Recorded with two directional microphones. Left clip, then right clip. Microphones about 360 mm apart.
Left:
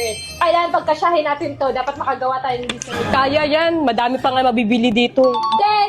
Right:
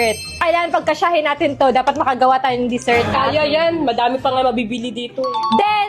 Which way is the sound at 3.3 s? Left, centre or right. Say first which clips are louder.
Even; left.